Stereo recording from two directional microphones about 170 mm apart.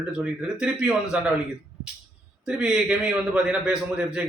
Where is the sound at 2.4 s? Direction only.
5° right (ahead or behind).